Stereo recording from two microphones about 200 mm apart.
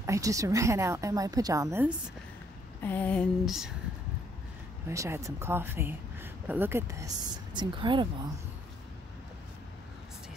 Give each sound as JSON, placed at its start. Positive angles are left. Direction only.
{"t": 0.0, "sound": "speech", "side_deg": -15}
{"t": 2.8, "sound": "a sound", "side_deg": 10}
{"t": 4.8, "sound": "speech", "side_deg": -15}